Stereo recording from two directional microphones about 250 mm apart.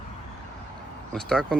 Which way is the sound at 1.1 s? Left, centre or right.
Centre.